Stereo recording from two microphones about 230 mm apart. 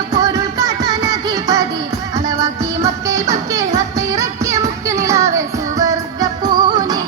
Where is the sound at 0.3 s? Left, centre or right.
Centre.